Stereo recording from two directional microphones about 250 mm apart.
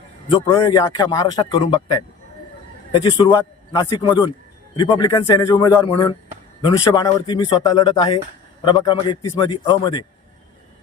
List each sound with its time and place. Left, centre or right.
0.3 s speech: left